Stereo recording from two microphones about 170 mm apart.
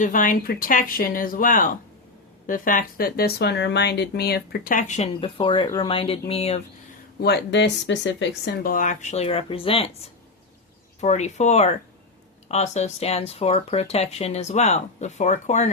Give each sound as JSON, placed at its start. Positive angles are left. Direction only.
{"t": 0.0, "sound": "speech", "side_deg": 50}
{"t": 7.2, "sound": "speech", "side_deg": 80}
{"t": 8.7, "sound": "speech", "side_deg": 50}
{"t": 11.0, "sound": "speech", "side_deg": 40}